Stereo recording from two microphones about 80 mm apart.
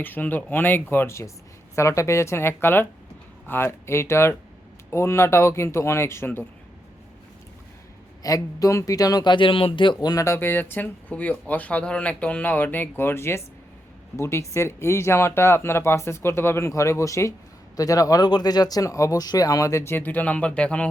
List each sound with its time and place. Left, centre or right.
0.0 s speech: left
8.2 s speech: left
9.2 s speech: left
10.1 s speech: left
18.3 s speech: left; by 20.9 s centre